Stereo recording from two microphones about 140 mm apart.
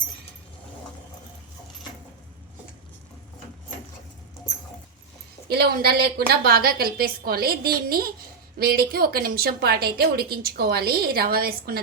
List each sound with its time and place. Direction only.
5.5 s a woman's voice: 90° right